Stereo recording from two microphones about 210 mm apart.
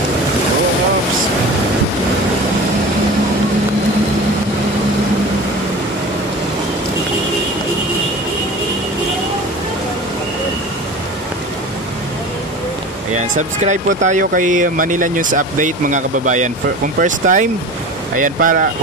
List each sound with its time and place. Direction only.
13.7 s speech: 35° right (ahead or behind)